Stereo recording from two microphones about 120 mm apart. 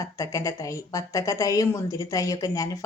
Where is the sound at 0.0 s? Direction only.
25° left (ahead or behind).